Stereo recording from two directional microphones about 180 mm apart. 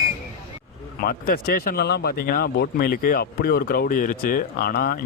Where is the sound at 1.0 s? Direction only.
55° left (ahead or behind).